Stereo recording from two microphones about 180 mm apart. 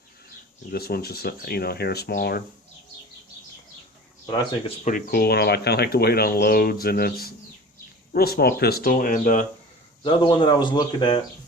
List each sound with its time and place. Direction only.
0.7 s speech: 60° left (ahead or behind)
4.8 s speech: 50° left (ahead or behind)
10.0 s speech: 30° left (ahead or behind)